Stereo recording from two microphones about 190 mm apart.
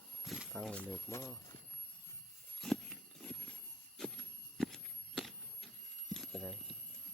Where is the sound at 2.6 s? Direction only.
Centre (ahead or behind).